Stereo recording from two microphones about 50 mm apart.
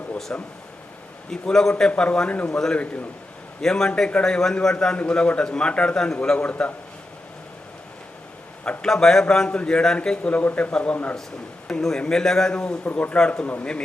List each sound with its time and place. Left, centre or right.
0.3 s speech: left
1.3 s a man's voice: centre
1.9 s speech: left
2.5 s a man's voice: centre
2.7 s speech: left
3.6 s a man's voice: centre
8.8 s a man's voice: centre
9.5 s speech: left
10.3 s speech: left
11.7 s a man's voice: centre
12.8 s speech: left
13.1 s a man's voice: centre
13.4 s speech: left